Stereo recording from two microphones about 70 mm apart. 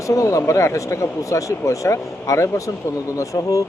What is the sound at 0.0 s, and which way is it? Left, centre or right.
Speech, left.